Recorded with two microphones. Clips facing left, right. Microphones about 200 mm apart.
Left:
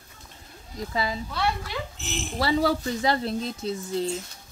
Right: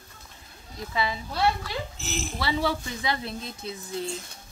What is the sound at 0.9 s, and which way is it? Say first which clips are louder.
Speech: even; 40° left (ahead or behind).